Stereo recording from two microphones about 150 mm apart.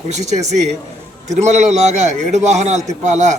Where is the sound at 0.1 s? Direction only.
50° right (ahead or behind).